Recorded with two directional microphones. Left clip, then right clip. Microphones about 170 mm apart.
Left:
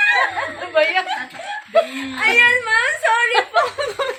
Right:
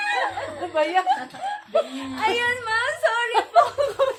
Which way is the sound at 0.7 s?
30° right (ahead or behind).